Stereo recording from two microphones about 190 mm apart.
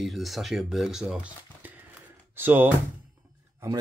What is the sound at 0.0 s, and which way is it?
Speech, centre (ahead or behind).